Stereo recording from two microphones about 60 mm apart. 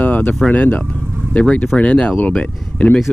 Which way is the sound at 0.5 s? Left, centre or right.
Left.